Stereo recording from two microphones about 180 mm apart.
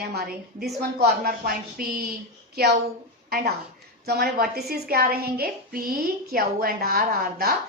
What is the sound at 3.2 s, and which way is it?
A woman's voice, 60° right (ahead or behind).